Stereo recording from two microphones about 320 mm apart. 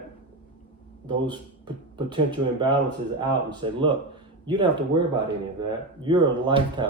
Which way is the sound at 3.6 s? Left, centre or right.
Centre.